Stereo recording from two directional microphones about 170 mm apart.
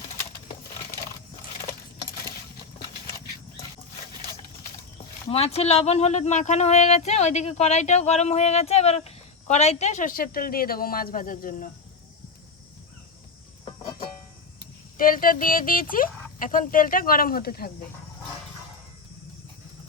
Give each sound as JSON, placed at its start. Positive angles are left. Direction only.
{"t": 5.3, "sound": "speech", "side_deg": 35}
{"t": 14.9, "sound": "speech", "side_deg": 55}